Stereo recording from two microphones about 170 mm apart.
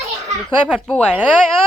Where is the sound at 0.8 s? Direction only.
5° left (ahead or behind).